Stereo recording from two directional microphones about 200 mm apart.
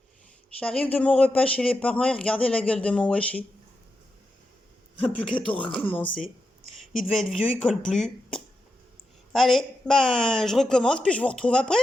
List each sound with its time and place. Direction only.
0.6 s speech: 5° left (ahead or behind)
5.3 s speech: 5° left (ahead or behind)
5.6 s speech: 25° left (ahead or behind)
6.7 s speech: centre (ahead or behind)